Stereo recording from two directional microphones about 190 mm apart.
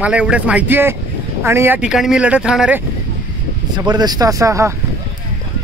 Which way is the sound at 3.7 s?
20° right (ahead or behind).